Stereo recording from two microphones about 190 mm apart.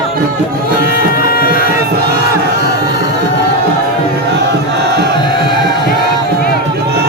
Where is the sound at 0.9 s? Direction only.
50° left (ahead or behind).